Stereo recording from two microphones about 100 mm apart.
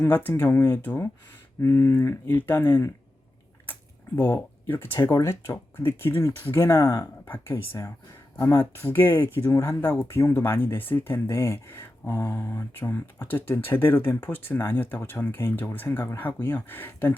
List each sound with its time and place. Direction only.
0.0 s speech: 20° left (ahead or behind)
5.1 s speech: 35° left (ahead or behind)